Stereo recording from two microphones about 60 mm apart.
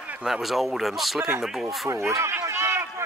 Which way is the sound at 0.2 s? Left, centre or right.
Centre.